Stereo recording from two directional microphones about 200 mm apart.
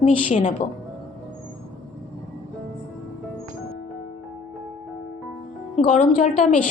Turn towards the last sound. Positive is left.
turn(degrees=35)  # may be behind; listen again after turning